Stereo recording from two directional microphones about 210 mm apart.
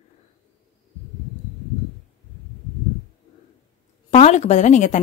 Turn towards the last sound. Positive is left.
turn(degrees=35)  # may be behind; listen again after turning